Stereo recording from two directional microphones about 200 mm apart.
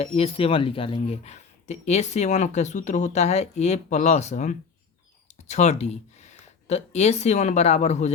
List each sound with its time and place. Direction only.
0.0 s speech: 30° left (ahead or behind)